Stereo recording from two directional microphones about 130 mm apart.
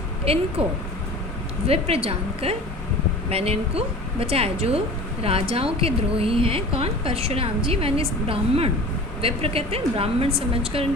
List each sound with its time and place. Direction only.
0.6 s a woman's voice: 50° right (ahead or behind)